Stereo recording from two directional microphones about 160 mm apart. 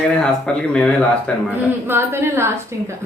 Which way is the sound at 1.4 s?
15° right (ahead or behind).